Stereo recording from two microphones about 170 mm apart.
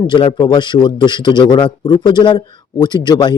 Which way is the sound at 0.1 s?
30° left (ahead or behind).